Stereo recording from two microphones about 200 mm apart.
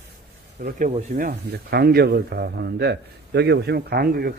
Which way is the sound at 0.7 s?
40° right (ahead or behind).